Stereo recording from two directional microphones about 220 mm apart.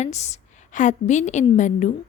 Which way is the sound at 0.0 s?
30° left (ahead or behind).